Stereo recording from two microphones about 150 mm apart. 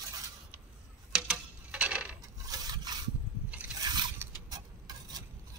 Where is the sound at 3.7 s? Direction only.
30° right (ahead or behind).